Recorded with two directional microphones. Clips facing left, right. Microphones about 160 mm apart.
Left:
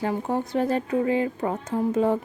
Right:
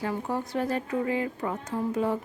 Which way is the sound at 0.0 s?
20° left (ahead or behind).